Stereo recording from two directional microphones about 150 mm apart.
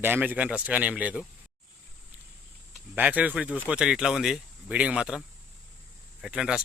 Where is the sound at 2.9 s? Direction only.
10° right (ahead or behind).